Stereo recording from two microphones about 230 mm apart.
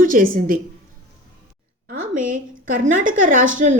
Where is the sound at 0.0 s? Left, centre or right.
Right.